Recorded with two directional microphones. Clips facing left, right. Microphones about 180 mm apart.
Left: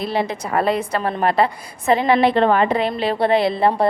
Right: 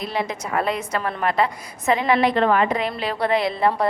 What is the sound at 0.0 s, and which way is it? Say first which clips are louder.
A woman's voice: left 4 dB; 30° left (ahead or behind).